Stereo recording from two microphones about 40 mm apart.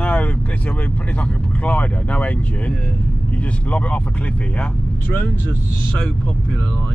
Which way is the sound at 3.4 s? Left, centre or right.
Left.